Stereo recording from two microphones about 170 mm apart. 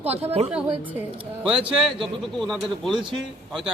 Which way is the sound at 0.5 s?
10° right (ahead or behind).